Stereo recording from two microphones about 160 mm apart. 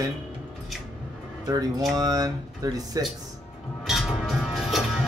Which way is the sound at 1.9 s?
20° right (ahead or behind).